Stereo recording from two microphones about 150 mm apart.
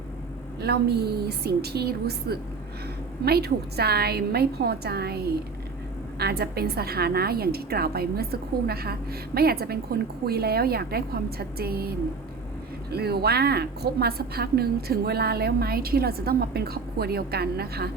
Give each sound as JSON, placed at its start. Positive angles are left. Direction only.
{"t": 0.6, "sound": "a woman's voice", "side_deg": -90}